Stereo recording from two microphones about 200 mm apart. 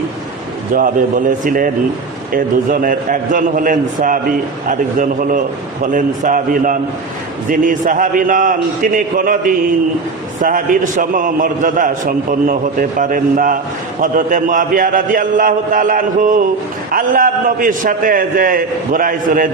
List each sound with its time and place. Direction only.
0.7 s a man's voice: 45° right (ahead or behind)